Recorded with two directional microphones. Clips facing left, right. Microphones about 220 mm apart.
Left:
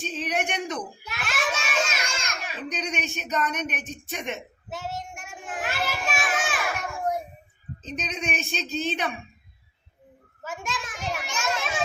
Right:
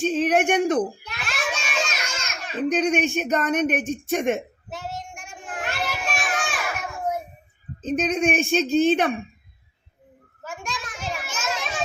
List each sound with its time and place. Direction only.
0.0 s a sound: 50° right (ahead or behind)
1.0 s children playing: centre (ahead or behind)
2.6 s speech: 50° right (ahead or behind)
4.7 s children playing: centre (ahead or behind)
7.8 s speech: 50° right (ahead or behind)
10.4 s children playing: 5° left (ahead or behind)